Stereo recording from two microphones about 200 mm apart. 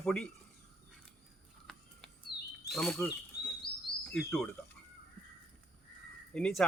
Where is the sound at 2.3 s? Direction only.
55° left (ahead or behind).